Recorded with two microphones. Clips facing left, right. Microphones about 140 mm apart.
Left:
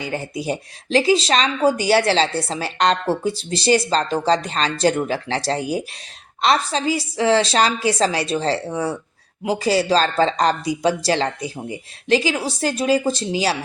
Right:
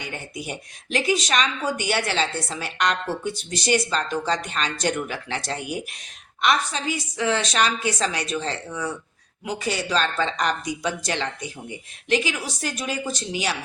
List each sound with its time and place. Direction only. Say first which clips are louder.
0.0 s speech: left 8 dB; 35° left (ahead or behind)